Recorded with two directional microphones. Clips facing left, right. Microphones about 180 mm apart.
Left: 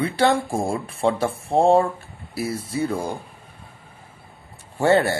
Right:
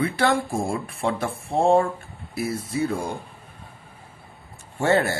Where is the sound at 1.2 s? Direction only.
Centre (ahead or behind).